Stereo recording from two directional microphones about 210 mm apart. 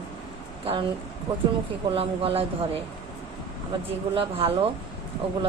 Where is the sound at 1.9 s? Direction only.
25° right (ahead or behind).